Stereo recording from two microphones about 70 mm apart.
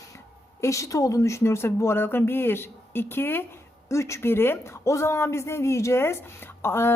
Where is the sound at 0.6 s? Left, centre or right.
Left.